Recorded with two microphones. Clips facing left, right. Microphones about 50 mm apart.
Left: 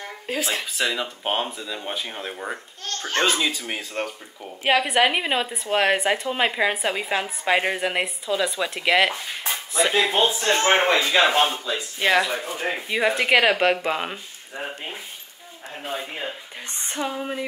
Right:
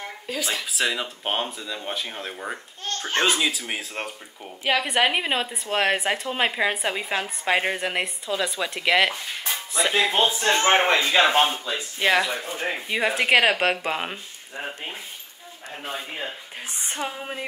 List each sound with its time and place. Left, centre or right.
0.3 s speech: left
0.7 s a woman's voice: centre
4.5 s a woman's voice: centre
10.4 s speech: centre
12.0 s a woman's voice: centre
16.1 s a woman's voice: centre
16.6 s a sound: centre